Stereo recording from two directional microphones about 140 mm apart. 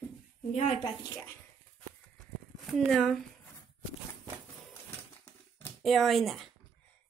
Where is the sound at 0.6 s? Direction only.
45° left (ahead or behind).